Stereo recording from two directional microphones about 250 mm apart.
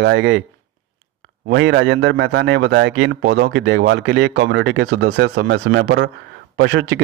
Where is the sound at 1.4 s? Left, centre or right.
Right.